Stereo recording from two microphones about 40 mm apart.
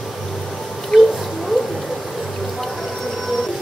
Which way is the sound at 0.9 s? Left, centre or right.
Centre.